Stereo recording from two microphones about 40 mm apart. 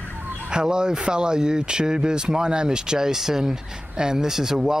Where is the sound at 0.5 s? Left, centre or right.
Centre.